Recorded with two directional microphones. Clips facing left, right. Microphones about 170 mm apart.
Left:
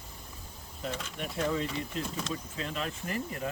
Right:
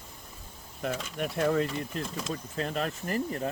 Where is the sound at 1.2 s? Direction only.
50° right (ahead or behind).